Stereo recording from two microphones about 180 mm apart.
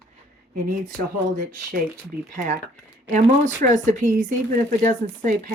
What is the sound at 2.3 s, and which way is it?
Speech, 45° right (ahead or behind).